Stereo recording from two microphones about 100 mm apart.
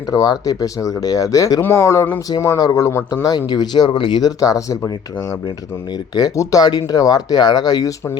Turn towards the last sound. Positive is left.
turn(degrees=40)  # may be behind; listen again after turning